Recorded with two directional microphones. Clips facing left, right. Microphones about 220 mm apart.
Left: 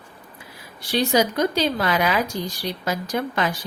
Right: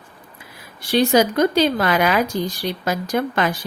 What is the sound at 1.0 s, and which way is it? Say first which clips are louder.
Speech: right 4 dB; 55° right (ahead or behind).